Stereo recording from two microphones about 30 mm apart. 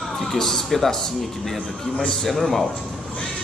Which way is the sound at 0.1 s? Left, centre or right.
Centre.